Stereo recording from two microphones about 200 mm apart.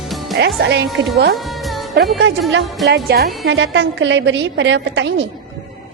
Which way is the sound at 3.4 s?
65° right (ahead or behind).